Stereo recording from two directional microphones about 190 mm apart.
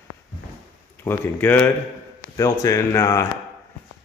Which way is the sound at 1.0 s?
10° left (ahead or behind).